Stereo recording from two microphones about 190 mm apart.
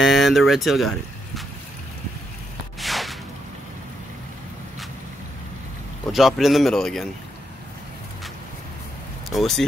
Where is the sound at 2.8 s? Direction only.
Centre (ahead or behind).